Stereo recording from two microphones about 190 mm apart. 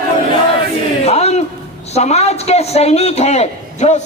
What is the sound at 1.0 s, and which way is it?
A man's voice, 35° left (ahead or behind).